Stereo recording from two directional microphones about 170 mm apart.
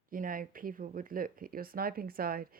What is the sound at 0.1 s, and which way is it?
Speech, 55° right (ahead or behind).